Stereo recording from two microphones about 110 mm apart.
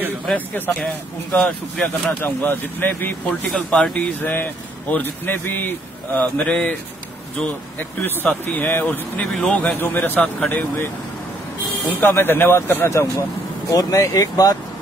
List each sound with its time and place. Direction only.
0.3 s speech: 10° left (ahead or behind)
2.2 s speech: 20° left (ahead or behind)
8.5 s speech: 15° left (ahead or behind)
12.0 s a man's voice: 20° left (ahead or behind)